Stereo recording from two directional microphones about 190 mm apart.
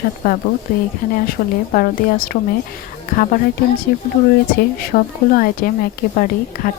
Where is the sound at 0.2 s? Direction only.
50° left (ahead or behind).